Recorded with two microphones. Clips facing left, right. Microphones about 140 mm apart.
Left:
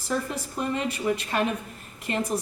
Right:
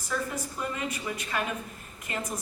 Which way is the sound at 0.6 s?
75° left (ahead or behind).